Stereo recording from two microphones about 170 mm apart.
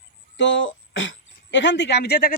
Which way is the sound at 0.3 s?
90° left.